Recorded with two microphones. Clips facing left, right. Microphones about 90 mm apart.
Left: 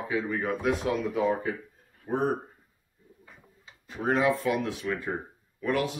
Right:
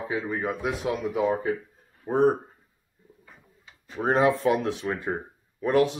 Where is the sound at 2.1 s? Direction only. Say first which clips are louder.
Right 5 dB; 35° right (ahead or behind).